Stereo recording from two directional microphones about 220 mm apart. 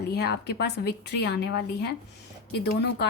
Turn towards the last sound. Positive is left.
turn(degrees=50)  # may be behind; listen again after turning